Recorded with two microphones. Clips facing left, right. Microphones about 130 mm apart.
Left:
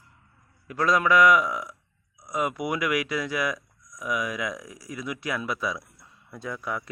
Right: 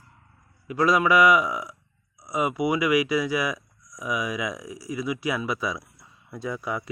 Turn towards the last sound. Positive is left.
turn(degrees=-5)  # may be behind; listen again after turning